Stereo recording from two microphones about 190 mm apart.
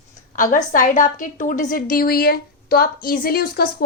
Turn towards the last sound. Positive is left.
turn(degrees=55)  # may be behind; listen again after turning